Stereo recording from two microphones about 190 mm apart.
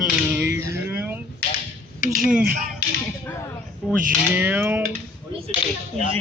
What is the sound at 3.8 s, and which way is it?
Speech, centre (ahead or behind).